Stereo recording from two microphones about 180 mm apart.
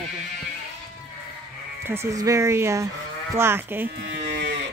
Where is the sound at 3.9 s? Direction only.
70° right (ahead or behind).